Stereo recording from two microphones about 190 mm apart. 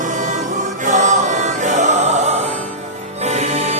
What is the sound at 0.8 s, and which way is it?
Music, 40° right (ahead or behind).